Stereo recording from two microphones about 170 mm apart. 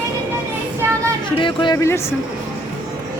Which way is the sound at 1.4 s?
30° left (ahead or behind).